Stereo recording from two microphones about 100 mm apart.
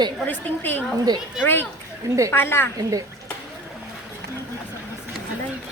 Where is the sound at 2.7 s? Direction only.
35° right (ahead or behind).